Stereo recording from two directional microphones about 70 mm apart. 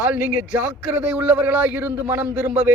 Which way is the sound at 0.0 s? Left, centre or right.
Right.